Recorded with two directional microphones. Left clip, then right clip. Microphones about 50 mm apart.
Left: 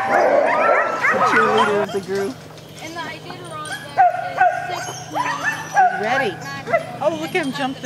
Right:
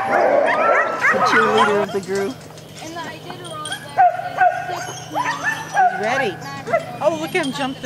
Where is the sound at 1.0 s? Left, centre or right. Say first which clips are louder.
Even; right.